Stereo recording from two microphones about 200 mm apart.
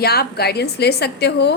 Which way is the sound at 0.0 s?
50° left (ahead or behind).